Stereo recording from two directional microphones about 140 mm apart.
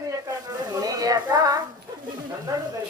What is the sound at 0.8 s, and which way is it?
Child singing, 25° right (ahead or behind).